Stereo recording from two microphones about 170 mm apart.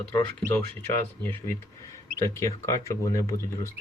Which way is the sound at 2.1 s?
20° left (ahead or behind).